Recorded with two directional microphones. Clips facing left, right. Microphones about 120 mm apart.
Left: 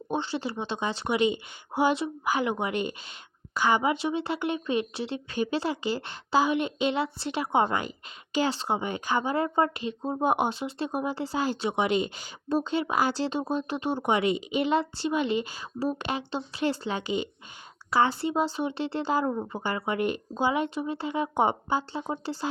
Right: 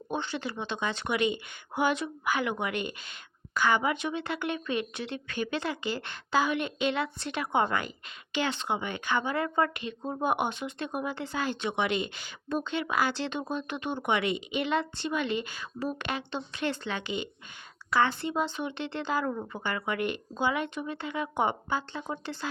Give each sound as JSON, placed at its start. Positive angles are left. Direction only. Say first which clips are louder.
{"t": 0.1, "sound": "speech", "louder": "left 3 dB", "side_deg": 30}
{"t": 3.6, "sound": "a woman's voice", "louder": "left 2 dB", "side_deg": 15}
{"t": 3.8, "sound": "speech", "louder": "left 4 dB", "side_deg": 30}
{"t": 18.3, "sound": "speech", "louder": "left 4 dB", "side_deg": 35}
{"t": 19.2, "sound": "speech", "louder": "left 4 dB", "side_deg": 20}
{"t": 19.6, "sound": "speech", "louder": "left 3 dB", "side_deg": 35}